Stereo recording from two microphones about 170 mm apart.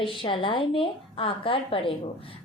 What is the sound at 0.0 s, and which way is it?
A woman's voice, 30° left (ahead or behind).